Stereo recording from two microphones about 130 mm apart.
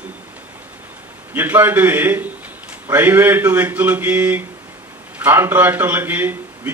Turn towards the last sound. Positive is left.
turn(degrees=-15)  # may be behind; listen again after turning